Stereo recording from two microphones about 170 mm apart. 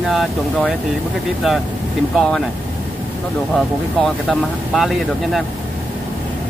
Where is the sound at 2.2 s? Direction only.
Centre (ahead or behind).